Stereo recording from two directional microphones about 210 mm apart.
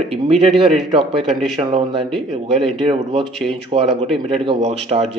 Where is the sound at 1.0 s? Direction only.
Centre (ahead or behind).